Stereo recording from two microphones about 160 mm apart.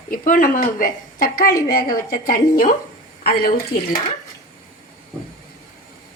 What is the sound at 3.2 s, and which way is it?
Speech, 75° left (ahead or behind).